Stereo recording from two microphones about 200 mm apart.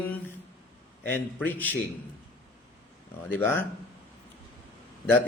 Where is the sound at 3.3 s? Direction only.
10° left (ahead or behind).